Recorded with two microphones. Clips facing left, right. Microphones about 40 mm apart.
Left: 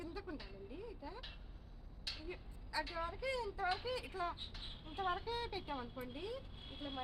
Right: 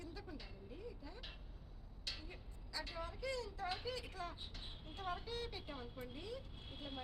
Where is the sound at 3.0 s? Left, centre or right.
Centre.